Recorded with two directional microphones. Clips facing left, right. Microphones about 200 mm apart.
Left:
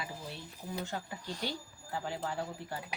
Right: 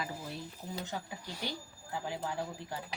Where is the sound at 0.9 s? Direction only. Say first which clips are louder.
Left 1 dB; 10° right (ahead or behind).